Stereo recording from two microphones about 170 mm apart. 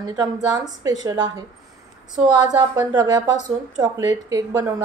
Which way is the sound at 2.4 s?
20° right (ahead or behind).